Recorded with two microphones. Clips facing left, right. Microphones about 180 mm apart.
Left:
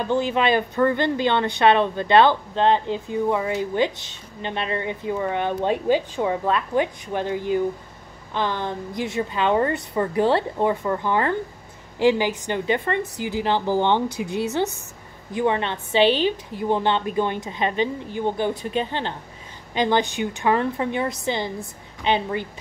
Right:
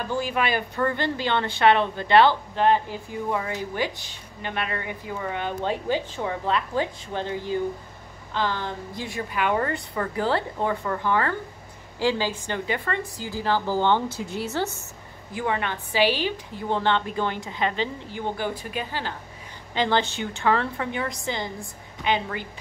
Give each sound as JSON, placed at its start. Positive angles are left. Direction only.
{"t": 0.1, "sound": "a woman's voice", "side_deg": 25}